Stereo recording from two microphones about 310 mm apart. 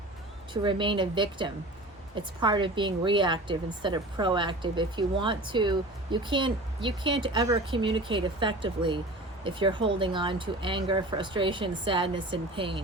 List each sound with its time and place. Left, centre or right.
0.5 s speech: centre